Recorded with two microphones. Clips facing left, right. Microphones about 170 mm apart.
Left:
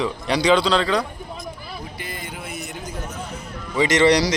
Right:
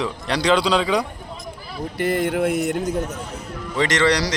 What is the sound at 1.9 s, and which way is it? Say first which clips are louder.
A man's voice: right 14 dB; 75° right (ahead or behind).